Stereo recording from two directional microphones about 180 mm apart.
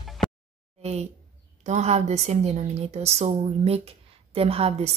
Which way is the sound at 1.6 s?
40° right (ahead or behind).